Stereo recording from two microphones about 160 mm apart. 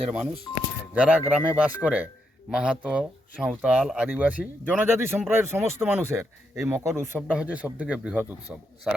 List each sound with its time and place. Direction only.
0.9 s a man's voice: 10° right (ahead or behind)